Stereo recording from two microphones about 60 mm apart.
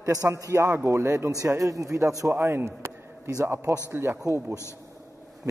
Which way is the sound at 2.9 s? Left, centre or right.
Right.